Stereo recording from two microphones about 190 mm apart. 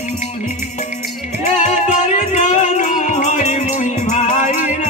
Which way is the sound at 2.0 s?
40° left (ahead or behind).